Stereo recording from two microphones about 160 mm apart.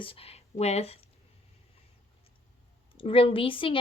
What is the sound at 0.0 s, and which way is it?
Speech, 35° left (ahead or behind).